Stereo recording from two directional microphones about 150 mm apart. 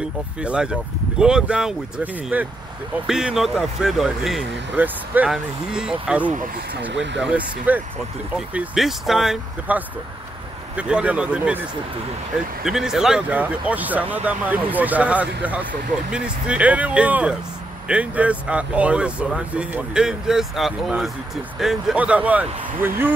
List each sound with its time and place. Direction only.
0.4 s speech: 5° right (ahead or behind)
4.7 s speech: 10° right (ahead or behind)
12.6 s speech: centre (ahead or behind)